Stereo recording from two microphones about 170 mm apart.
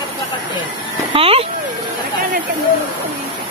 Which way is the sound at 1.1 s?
35° right (ahead or behind).